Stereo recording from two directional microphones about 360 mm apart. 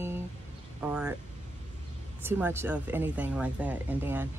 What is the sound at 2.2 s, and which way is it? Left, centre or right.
Speech, centre.